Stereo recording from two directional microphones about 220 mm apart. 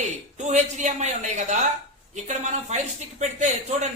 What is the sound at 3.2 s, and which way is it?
Speech, 30° right (ahead or behind).